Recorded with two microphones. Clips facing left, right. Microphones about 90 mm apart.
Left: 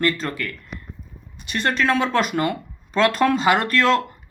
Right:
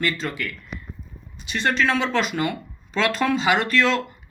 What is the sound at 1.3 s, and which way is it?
Speech, 55° left (ahead or behind).